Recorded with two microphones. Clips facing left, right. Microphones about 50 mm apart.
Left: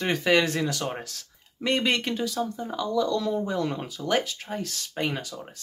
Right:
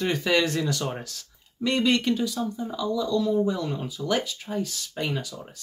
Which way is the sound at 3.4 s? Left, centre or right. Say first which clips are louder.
Even; left.